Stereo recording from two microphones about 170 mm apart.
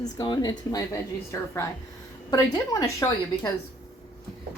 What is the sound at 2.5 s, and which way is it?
Speech, 20° left (ahead or behind).